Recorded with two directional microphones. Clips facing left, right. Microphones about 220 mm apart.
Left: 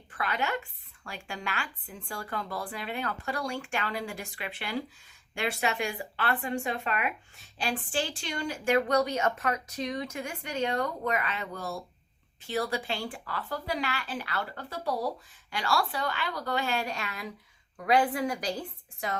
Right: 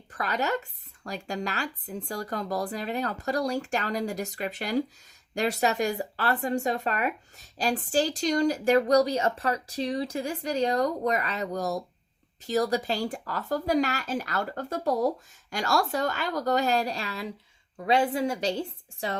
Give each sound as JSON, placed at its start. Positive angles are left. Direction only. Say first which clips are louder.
{"t": 0.1, "sound": "a woman's voice", "louder": "right 3 dB", "side_deg": -40}